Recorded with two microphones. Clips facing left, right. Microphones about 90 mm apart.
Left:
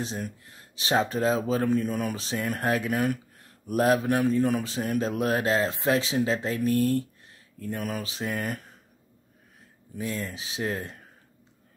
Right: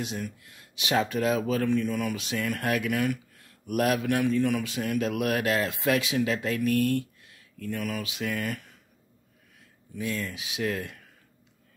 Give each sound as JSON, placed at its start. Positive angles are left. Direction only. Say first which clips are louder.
{"t": 0.0, "sound": "speech", "louder": "left 1 dB", "side_deg": 35}
{"t": 9.9, "sound": "speech", "louder": "even", "side_deg": 30}